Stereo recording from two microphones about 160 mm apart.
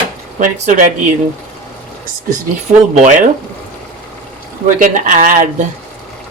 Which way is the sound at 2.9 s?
50° right (ahead or behind).